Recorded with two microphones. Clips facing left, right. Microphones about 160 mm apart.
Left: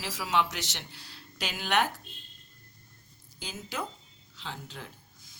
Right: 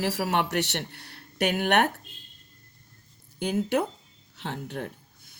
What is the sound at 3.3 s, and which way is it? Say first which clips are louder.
A woman's voice: right 12 dB; 65° right (ahead or behind).